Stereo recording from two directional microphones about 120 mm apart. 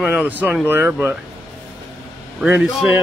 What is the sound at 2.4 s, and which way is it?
Speech, 10° right (ahead or behind).